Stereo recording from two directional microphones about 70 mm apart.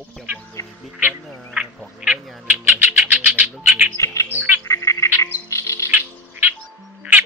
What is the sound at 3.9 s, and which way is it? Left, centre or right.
Speech, left.